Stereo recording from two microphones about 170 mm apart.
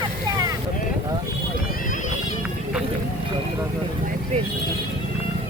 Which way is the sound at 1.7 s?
50° left (ahead or behind).